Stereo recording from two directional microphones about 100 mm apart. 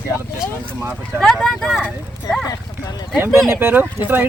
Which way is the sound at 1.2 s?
5° left (ahead or behind).